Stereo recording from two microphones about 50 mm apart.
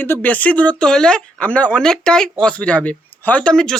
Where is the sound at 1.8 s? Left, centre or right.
Centre.